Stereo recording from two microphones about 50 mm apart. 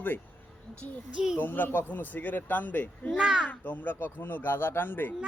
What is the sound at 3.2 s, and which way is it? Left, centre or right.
Speech, centre.